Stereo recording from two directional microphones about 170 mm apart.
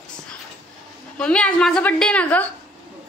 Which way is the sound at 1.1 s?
5° left (ahead or behind).